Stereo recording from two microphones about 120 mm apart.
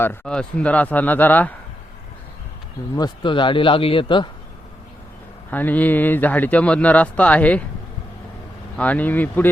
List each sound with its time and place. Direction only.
0.3 s speech: 10° left (ahead or behind)
2.9 s speech: 40° left (ahead or behind)
5.5 s speech: 15° left (ahead or behind)
8.7 s speech: 10° left (ahead or behind)